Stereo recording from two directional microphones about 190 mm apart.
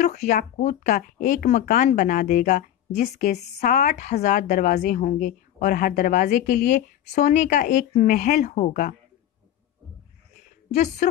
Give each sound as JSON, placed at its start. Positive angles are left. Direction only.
{"t": 0.0, "sound": "a woman's voice", "side_deg": 45}
{"t": 10.7, "sound": "speech", "side_deg": 40}